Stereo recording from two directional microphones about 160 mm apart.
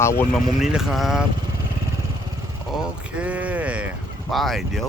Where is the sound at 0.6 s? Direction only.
5° right (ahead or behind).